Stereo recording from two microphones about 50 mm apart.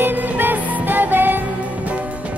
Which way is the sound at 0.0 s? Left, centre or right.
Right.